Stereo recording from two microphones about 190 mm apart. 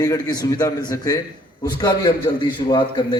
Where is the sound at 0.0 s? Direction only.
20° left (ahead or behind).